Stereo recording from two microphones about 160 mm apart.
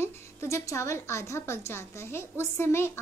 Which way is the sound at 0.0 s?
15° left (ahead or behind).